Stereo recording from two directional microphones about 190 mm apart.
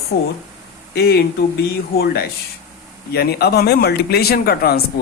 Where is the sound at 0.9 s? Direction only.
60° left (ahead or behind).